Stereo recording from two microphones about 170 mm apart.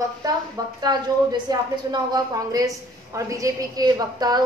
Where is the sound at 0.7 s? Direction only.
25° right (ahead or behind).